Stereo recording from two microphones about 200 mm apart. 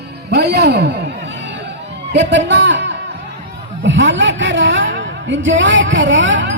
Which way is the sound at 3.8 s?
65° right (ahead or behind).